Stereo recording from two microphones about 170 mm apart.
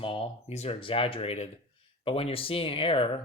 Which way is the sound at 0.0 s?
30° left (ahead or behind).